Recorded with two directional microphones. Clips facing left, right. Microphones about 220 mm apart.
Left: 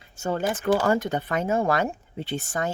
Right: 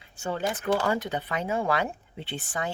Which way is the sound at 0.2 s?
45° left (ahead or behind).